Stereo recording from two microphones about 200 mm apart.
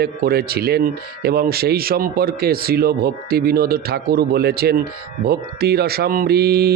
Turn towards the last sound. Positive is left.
turn(degrees=-50)  # may be behind; listen again after turning